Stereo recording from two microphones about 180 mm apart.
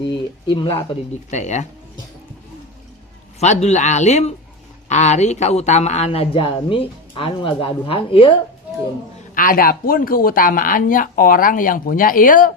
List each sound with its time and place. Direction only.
0.5 s speech: 30° left (ahead or behind)
3.4 s a woman's voice: 40° left (ahead or behind)
9.3 s speech: 50° left (ahead or behind)